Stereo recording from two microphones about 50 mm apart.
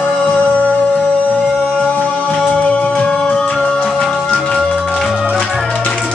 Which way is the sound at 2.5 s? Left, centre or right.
Left.